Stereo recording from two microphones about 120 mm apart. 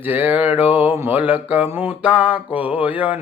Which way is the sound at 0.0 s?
15° right (ahead or behind).